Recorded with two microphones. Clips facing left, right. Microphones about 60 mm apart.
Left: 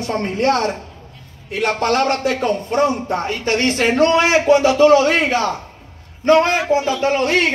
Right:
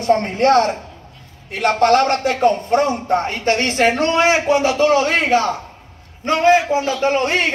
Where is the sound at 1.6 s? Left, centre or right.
Right.